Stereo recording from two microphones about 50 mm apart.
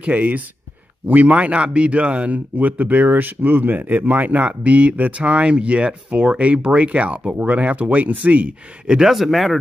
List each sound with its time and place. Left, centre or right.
0.0 s speech: right
2.5 s speech: right
8.8 s speech: centre
9.1 s speech: centre